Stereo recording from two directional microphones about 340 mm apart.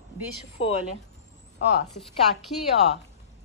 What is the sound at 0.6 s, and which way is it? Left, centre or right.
Speech, centre.